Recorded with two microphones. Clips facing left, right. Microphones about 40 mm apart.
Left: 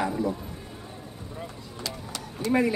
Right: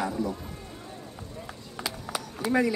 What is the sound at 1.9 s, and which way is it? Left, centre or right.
Run, centre.